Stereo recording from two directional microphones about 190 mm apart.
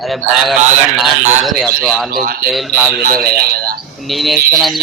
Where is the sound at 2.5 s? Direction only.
Centre (ahead or behind).